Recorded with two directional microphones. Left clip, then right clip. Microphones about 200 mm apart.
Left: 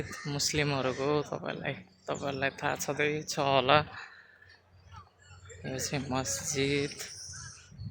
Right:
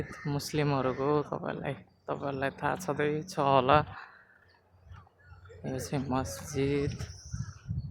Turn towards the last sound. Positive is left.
turn(degrees=-5)  # may be behind; listen again after turning